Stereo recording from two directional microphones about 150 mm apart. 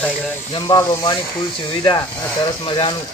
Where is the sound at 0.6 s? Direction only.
30° left (ahead or behind).